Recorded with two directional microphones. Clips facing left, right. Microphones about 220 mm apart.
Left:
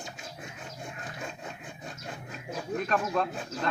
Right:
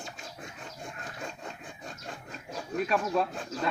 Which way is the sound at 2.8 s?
5° right (ahead or behind).